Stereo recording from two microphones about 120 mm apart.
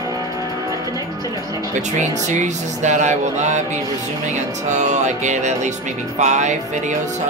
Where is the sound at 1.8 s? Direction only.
85° right.